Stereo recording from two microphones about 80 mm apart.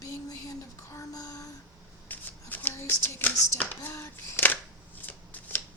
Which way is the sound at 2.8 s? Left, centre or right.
Left.